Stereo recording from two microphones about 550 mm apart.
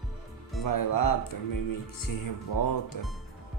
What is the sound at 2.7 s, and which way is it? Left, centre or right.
Speech, left.